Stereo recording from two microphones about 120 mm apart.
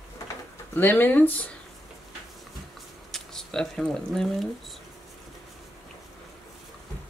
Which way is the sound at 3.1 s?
5° left (ahead or behind).